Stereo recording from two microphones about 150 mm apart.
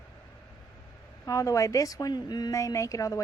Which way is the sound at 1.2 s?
20° left (ahead or behind).